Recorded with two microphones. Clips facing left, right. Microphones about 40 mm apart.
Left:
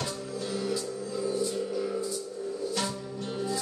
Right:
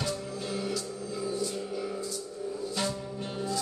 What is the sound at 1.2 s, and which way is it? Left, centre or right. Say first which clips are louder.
Music: left 3 dB; centre.